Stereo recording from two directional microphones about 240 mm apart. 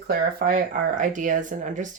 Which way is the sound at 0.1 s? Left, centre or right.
Right.